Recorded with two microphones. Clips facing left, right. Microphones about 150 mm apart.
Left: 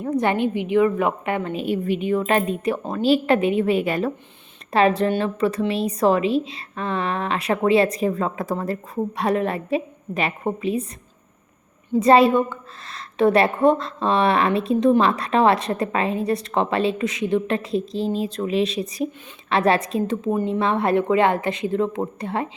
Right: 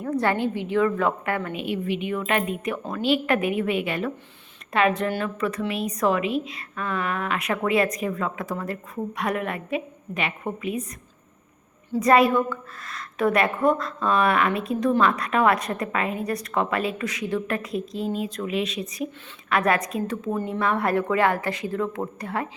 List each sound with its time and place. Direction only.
0.0 s a woman's voice: 20° left (ahead or behind)
1.5 s a woman's voice: 40° left (ahead or behind)
11.9 s a woman's voice: 25° left (ahead or behind)